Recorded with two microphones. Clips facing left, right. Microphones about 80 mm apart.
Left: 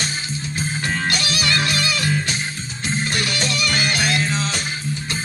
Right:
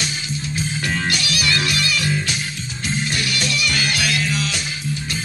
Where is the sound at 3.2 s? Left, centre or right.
Left.